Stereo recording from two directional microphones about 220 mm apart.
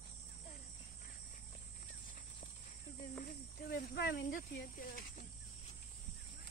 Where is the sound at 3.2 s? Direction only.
45° left (ahead or behind).